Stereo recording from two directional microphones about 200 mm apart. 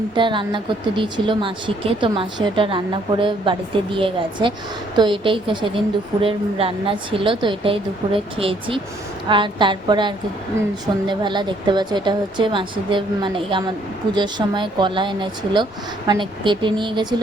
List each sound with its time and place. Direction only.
0.1 s a woman's voice: 25° right (ahead or behind)